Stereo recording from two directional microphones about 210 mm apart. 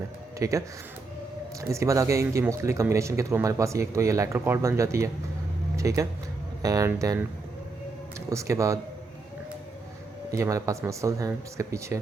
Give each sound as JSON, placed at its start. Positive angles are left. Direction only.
{"t": 0.3, "sound": "speech", "side_deg": -15}
{"t": 1.7, "sound": "speech", "side_deg": -15}
{"t": 8.3, "sound": "speech", "side_deg": -15}
{"t": 10.3, "sound": "speech", "side_deg": -15}